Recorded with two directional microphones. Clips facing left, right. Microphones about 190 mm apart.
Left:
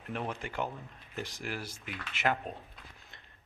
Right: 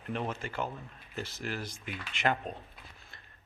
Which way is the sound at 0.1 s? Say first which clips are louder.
Right 2 dB; 10° left (ahead or behind).